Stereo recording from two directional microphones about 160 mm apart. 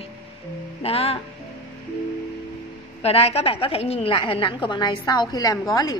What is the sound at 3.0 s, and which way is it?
A woman's voice, 40° left (ahead or behind).